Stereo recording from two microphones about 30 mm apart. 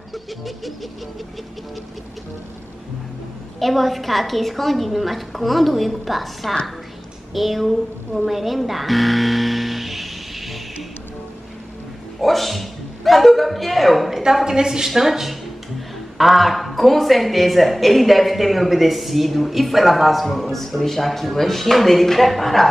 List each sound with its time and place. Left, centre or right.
3.5 s a man's voice: centre
8.3 s music: centre
12.2 s a sound: centre
14.4 s a woman's voice: right
15.0 s a man's voice: centre